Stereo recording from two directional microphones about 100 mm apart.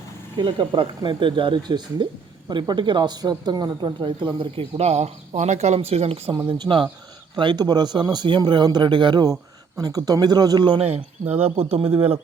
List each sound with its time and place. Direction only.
0.3 s speech: 55° right (ahead or behind); by 6.3 s 85° right
6.5 s speech: 60° right (ahead or behind)
9.7 s speech: 40° right (ahead or behind)
10.7 s speech: 80° right